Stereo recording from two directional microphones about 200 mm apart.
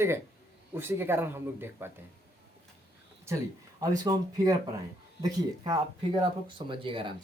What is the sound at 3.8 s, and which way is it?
Speech, 15° right (ahead or behind).